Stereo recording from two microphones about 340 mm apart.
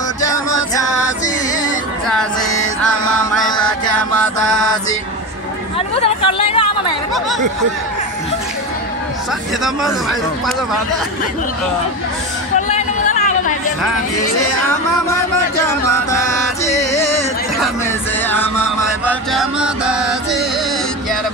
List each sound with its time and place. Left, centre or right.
0.2 s music: centre
3.4 s music: centre
5.9 s a sound: centre
12.6 s chatter: left
15.6 s music: centre
18.3 s music: centre